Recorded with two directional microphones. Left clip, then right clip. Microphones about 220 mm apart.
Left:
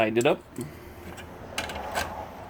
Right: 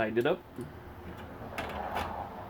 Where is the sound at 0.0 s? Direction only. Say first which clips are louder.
Left 6 dB; 35° left (ahead or behind).